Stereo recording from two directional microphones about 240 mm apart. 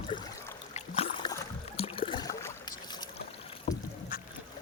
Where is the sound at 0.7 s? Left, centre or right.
Left.